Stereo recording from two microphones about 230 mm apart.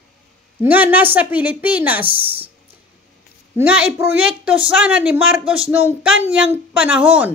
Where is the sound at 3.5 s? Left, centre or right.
Centre.